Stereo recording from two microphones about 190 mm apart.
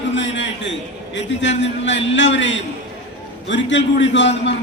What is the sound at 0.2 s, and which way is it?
A man's voice, 70° left (ahead or behind).